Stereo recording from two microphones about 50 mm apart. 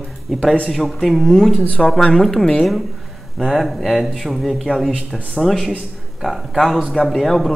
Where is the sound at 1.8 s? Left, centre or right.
Centre.